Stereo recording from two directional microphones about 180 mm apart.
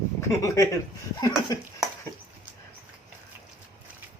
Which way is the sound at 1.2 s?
20° left (ahead or behind).